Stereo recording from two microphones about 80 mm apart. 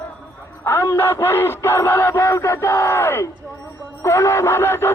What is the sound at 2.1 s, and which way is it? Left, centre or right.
Speech, left.